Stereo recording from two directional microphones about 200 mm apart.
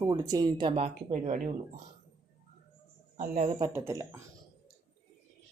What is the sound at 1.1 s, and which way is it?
Typing, 35° right (ahead or behind).